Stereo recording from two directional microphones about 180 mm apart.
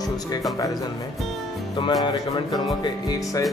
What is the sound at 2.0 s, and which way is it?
Music, 25° left (ahead or behind).